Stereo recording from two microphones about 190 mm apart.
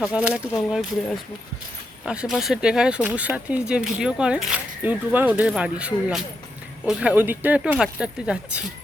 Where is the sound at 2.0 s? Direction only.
5° right (ahead or behind).